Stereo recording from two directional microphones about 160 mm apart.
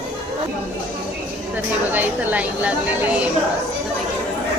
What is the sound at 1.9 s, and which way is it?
Speech, 10° right (ahead or behind).